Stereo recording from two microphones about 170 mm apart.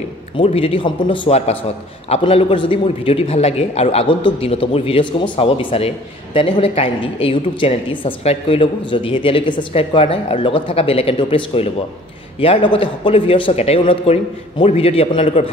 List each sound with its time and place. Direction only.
0.4 s a man's voice: 35° left (ahead or behind)